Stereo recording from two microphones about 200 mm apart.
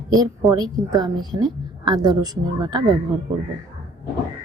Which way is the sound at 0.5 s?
20° right (ahead or behind).